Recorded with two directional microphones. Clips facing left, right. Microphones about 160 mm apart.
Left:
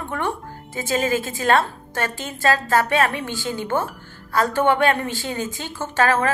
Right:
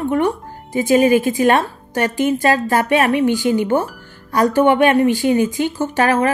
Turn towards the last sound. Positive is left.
turn(degrees=-15)  # may be behind; listen again after turning